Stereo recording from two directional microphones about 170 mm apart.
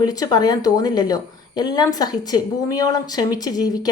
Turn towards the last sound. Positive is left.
turn(degrees=20)  # may be behind; listen again after turning